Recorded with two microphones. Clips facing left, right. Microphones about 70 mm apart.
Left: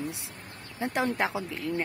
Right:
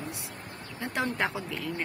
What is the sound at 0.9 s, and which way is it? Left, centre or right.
Speech, left.